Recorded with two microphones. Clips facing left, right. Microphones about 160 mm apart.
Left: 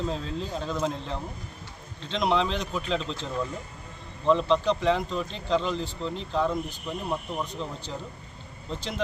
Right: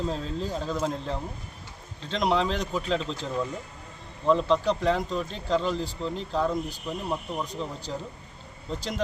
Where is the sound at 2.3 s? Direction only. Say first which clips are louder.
Even; 5° right (ahead or behind).